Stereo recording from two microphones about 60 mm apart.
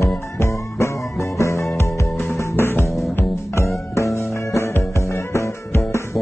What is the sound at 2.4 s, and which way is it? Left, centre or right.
Music, left.